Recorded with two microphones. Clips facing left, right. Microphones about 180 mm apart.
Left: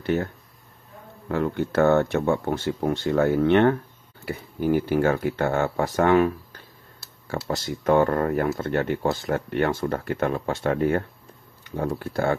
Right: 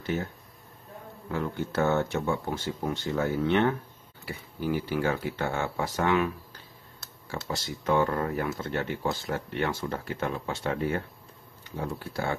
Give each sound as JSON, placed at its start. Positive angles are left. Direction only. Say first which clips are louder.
{"t": 0.0, "sound": "speech", "louder": "left 6 dB", "side_deg": 65}
{"t": 1.3, "sound": "speech", "louder": "left 7 dB", "side_deg": 60}
{"t": 7.2, "sound": "speech", "louder": "left 6 dB", "side_deg": 55}